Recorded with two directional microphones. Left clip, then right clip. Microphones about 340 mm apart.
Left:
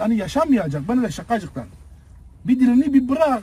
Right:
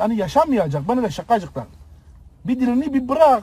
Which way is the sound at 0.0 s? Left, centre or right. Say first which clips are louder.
Right 3 dB; centre.